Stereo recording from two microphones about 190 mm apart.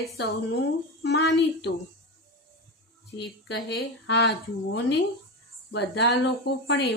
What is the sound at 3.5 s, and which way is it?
A woman's voice, 65° left (ahead or behind).